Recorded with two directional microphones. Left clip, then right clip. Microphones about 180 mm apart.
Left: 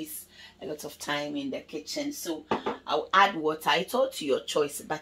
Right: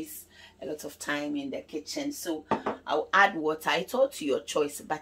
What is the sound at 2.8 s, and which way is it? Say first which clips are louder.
Speech: even; 20° left (ahead or behind).